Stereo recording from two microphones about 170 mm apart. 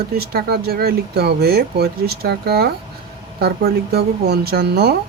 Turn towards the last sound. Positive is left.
turn(degrees=-70)  # may be behind; listen again after turning